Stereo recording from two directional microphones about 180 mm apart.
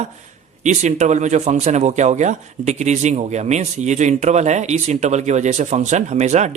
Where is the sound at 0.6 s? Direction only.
40° right (ahead or behind).